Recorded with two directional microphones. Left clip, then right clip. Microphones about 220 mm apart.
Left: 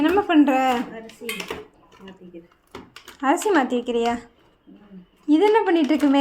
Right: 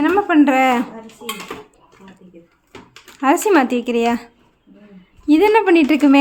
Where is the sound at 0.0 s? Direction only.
15° right (ahead or behind).